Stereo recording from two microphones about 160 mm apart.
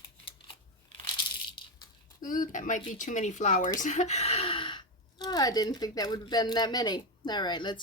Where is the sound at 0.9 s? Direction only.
30° left (ahead or behind).